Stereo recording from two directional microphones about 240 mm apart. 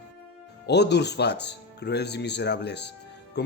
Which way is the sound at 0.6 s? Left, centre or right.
Left.